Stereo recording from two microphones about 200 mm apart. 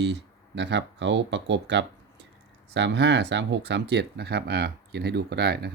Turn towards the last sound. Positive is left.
turn(degrees=-55)  # may be behind; listen again after turning